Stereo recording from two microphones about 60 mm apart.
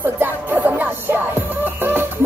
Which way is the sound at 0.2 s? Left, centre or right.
Right.